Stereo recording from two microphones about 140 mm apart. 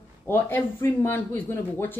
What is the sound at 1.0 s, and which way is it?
Speech, 15° left (ahead or behind).